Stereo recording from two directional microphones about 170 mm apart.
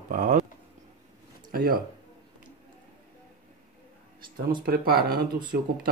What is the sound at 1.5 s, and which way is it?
Speech, 60° right (ahead or behind).